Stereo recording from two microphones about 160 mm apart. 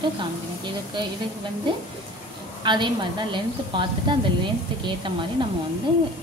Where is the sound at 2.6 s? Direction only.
30° right (ahead or behind).